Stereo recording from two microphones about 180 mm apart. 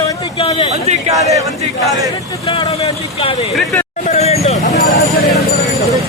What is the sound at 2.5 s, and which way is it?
Speech, 30° left (ahead or behind).